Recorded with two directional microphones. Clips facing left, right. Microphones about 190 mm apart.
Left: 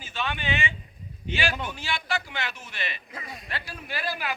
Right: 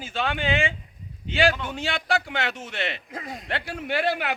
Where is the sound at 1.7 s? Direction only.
80° right.